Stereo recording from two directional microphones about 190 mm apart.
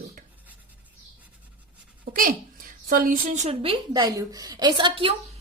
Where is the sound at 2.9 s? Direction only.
45° right (ahead or behind).